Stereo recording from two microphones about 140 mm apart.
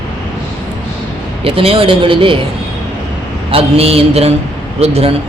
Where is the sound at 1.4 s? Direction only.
40° right (ahead or behind).